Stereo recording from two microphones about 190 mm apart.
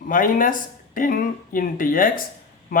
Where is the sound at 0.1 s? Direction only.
45° left (ahead or behind).